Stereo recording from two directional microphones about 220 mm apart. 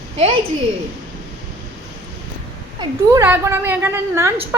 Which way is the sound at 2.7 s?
15° right (ahead or behind).